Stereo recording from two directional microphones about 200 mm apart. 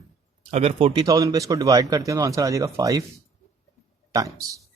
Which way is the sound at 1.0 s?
15° right (ahead or behind).